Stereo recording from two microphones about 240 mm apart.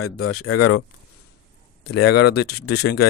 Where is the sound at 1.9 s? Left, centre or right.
Left.